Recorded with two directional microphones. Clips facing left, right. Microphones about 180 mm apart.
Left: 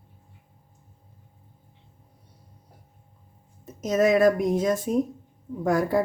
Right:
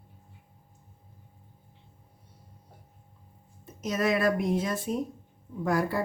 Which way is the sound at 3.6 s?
45° left (ahead or behind).